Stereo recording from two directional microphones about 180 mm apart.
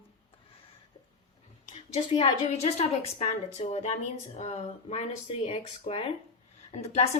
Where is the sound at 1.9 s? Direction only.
30° left (ahead or behind).